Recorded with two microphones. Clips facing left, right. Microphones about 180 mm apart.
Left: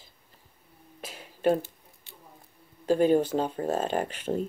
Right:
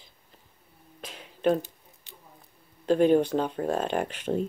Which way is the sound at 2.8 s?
10° left (ahead or behind).